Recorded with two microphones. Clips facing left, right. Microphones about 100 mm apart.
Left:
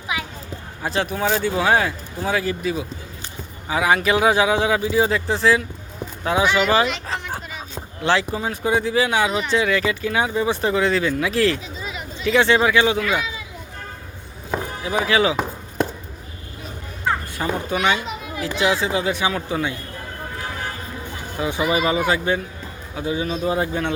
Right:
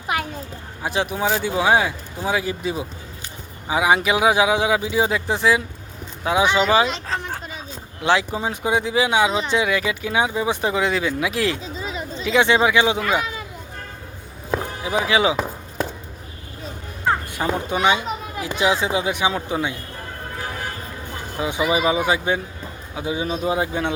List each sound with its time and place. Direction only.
0.8 s speech: 15° right (ahead or behind)
8.0 s speech: 15° right (ahead or behind)
11.8 s a sound: 30° right (ahead or behind)
12.2 s speech: 15° right (ahead or behind)
14.8 s speech: 15° right (ahead or behind)
17.3 s speech: 20° right (ahead or behind)
21.3 s speech: 15° right (ahead or behind)